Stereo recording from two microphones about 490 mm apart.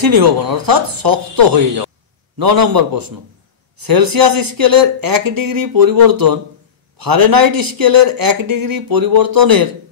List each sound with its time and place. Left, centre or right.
0.0 s speech: right